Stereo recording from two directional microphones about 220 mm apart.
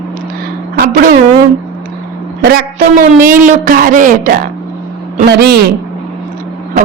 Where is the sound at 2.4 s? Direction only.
40° right (ahead or behind).